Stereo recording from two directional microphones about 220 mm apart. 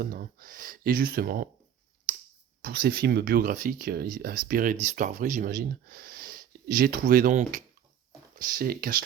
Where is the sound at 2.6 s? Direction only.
45° right (ahead or behind).